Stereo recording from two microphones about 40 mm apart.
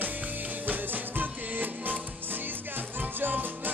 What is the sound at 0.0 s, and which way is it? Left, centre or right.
Music, right.